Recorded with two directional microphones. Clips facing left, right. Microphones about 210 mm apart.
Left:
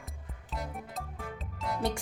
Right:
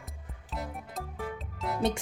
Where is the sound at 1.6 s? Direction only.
Centre (ahead or behind).